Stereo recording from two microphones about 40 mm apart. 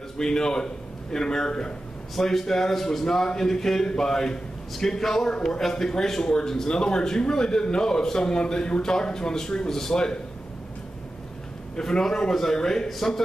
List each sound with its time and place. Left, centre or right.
0.2 s speech: centre
11.7 s speech: centre